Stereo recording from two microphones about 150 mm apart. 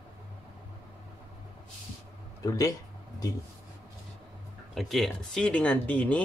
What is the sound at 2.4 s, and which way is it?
Speech, 20° left (ahead or behind).